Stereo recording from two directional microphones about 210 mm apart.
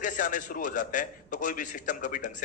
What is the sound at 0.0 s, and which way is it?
A man's voice, 40° left (ahead or behind).